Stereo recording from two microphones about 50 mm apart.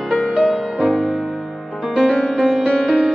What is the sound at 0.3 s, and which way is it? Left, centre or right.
Music, centre.